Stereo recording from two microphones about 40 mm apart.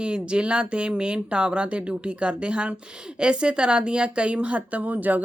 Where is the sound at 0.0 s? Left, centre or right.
Right.